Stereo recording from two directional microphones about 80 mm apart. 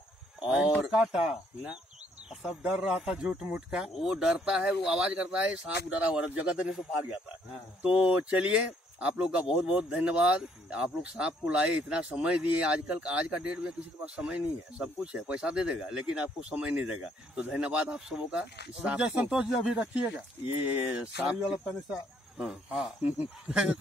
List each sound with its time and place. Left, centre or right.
0.4 s speech: centre
7.8 s speech: centre
23.0 s speech: centre